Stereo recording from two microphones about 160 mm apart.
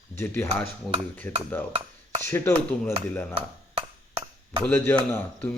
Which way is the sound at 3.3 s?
35° right (ahead or behind).